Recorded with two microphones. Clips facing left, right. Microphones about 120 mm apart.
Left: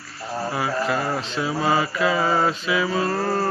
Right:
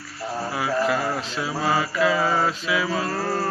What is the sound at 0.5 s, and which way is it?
Mantra, centre (ahead or behind).